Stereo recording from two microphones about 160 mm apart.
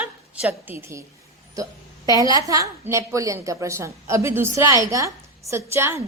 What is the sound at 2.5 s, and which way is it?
A woman's voice, 20° right (ahead or behind).